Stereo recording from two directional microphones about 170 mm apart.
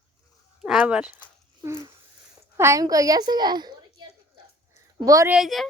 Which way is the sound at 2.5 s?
15° right (ahead or behind).